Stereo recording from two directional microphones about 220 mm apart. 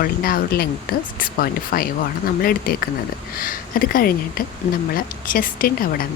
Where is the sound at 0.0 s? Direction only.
40° left (ahead or behind).